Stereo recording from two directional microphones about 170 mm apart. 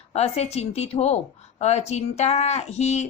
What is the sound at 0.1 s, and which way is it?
A woman's voice, 40° left (ahead or behind).